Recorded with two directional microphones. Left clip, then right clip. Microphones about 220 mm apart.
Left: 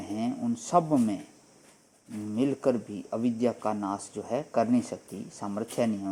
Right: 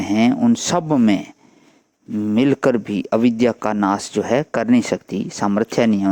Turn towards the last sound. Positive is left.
turn(degrees=-35)  # may be behind; listen again after turning